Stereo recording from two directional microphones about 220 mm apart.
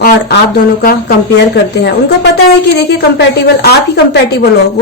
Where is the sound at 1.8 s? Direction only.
50° left (ahead or behind).